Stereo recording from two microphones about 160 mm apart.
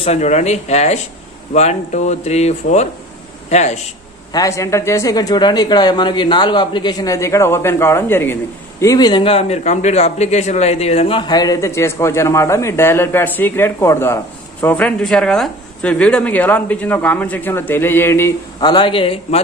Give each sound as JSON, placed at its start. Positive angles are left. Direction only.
{"t": 0.0, "sound": "speech", "side_deg": 45}
{"t": 4.3, "sound": "speech", "side_deg": 20}
{"t": 8.8, "sound": "a man's voice", "side_deg": 25}
{"t": 18.6, "sound": "a man's voice", "side_deg": 30}